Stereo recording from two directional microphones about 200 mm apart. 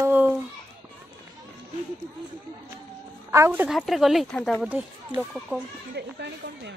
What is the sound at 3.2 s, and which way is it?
Speech, 10° right (ahead or behind).